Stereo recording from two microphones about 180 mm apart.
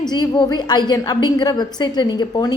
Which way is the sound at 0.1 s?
25° left (ahead or behind).